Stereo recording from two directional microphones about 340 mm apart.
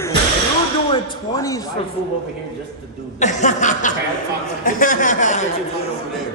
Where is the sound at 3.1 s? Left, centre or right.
Left.